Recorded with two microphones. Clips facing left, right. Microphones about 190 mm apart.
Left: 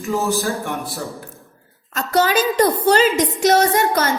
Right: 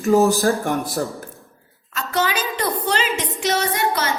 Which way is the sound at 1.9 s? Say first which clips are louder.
Left 5 dB; 40° left (ahead or behind).